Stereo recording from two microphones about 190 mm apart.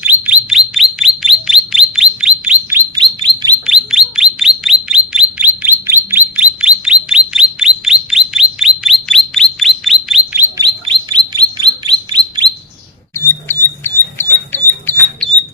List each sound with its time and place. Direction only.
0.0 s bird: 5° right (ahead or behind)
3.0 s chirp: 25° right (ahead or behind)
3.7 s bird: 5° right (ahead or behind)
11.1 s chirp: 20° right (ahead or behind)
13.5 s a sound: 10° left (ahead or behind)